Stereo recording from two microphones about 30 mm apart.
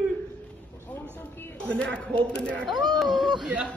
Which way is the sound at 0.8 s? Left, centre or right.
Left.